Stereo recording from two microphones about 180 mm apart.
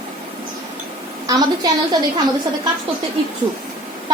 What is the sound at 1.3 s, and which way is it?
Speech, 20° right (ahead or behind).